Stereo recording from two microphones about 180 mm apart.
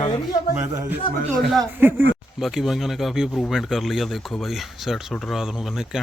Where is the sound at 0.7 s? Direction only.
20° right (ahead or behind).